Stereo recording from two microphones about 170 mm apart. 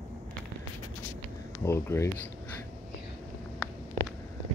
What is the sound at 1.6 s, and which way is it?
Speech, 15° left (ahead or behind).